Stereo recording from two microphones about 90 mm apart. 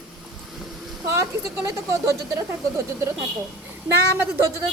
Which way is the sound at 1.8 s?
40° right (ahead or behind).